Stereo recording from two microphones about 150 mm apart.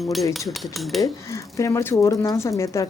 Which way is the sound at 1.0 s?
20° left (ahead or behind).